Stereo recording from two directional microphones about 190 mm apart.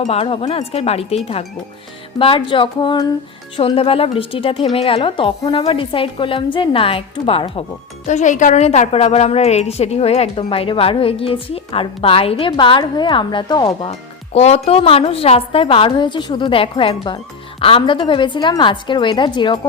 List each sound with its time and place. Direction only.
0.0 s a woman's voice: 30° left (ahead or behind)
8.0 s a woman's voice: 40° left (ahead or behind); by 19.5 s 25° left (ahead or behind)